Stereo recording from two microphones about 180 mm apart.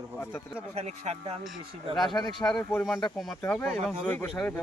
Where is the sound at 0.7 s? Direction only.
35° right (ahead or behind).